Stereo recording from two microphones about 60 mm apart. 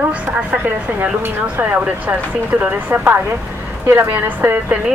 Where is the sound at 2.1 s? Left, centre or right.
Right.